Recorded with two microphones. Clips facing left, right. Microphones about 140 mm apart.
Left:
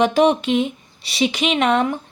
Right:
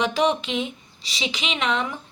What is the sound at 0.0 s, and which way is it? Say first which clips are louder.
Speech: left 6 dB; 50° left (ahead or behind).